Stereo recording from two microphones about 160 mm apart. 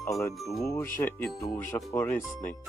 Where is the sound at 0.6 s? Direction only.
15° left (ahead or behind).